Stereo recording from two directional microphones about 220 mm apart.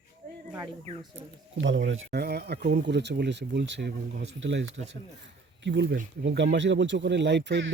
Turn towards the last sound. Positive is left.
turn(degrees=-50)  # may be behind; listen again after turning